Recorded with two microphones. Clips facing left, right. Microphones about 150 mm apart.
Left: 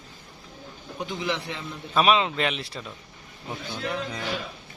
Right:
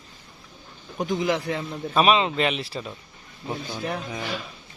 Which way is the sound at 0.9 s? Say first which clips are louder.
Right 6 dB; 40° right (ahead or behind).